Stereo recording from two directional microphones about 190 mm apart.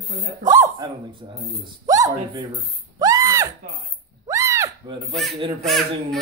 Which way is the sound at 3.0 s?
20° right (ahead or behind).